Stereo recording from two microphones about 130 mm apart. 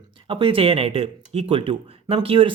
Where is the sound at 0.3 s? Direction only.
45° right (ahead or behind).